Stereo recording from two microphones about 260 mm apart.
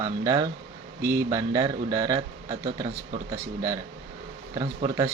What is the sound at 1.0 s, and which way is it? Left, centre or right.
Speech, right.